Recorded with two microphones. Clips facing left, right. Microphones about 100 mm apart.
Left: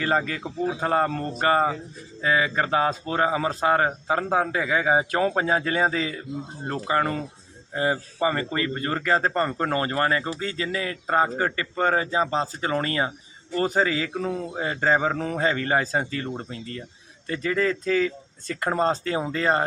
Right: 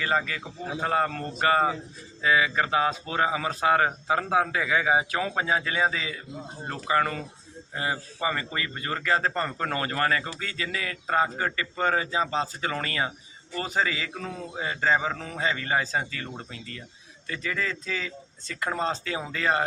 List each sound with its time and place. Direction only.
0.0 s speech: 35° left (ahead or behind)